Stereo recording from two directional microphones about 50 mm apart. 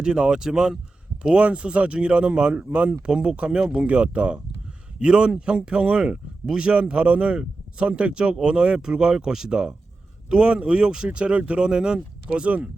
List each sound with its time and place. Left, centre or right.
0.0 s speech: centre
1.2 s speech: right